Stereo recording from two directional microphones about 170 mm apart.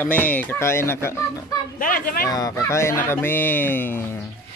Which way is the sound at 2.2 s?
20° left (ahead or behind).